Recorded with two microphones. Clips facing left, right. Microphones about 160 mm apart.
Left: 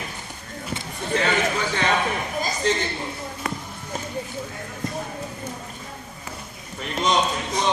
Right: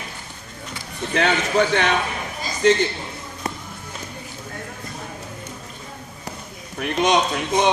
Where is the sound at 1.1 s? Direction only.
70° right (ahead or behind).